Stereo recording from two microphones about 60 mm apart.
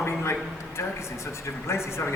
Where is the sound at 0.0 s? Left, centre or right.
Left.